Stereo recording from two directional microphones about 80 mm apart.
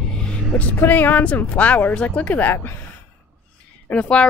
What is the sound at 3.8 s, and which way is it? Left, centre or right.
Speech, centre.